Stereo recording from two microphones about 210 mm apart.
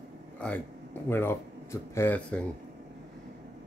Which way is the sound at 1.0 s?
10° left (ahead or behind).